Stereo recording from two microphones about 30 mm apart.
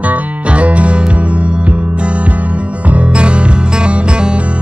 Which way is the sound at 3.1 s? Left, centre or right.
Right.